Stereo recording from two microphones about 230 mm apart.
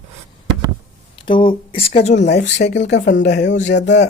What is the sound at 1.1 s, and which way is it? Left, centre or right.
Speech, left.